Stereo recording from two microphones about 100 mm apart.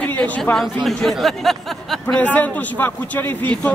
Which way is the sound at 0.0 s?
20° left (ahead or behind).